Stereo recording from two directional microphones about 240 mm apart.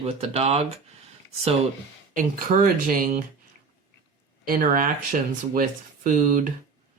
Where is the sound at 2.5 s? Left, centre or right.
Right.